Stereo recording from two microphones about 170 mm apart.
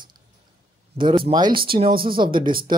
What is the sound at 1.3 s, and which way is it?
Speech, 25° right (ahead or behind).